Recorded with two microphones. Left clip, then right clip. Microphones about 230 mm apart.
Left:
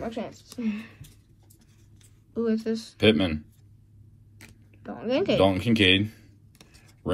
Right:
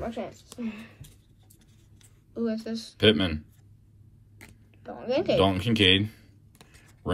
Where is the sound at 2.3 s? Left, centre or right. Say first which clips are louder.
Left 4 dB; left.